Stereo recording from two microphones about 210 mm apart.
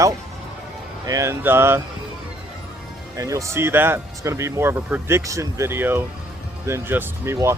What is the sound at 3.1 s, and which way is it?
Speech, 15° right (ahead or behind).